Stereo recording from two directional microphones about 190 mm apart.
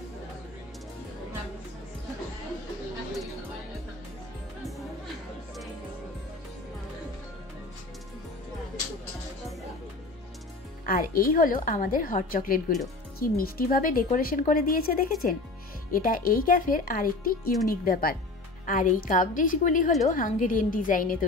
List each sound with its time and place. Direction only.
10.9 s speech: 50° left (ahead or behind)